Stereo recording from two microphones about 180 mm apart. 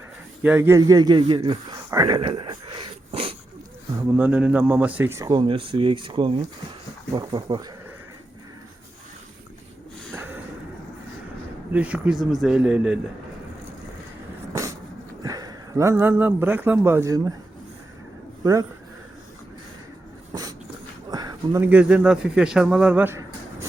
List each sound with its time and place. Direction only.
0.4 s speech: 10° right (ahead or behind); by 3.3 s 30° right (ahead or behind)
4.1 s speech: 10° right (ahead or behind)
11.7 s a man's voice: 10° right (ahead or behind)
15.2 s speech: 20° right (ahead or behind)
18.4 s speech: 20° right (ahead or behind)
21.1 s a sound: 20° right (ahead or behind)
21.6 s speech: 10° right (ahead or behind)